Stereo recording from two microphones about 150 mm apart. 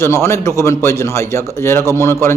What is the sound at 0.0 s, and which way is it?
A man's voice, 15° left (ahead or behind).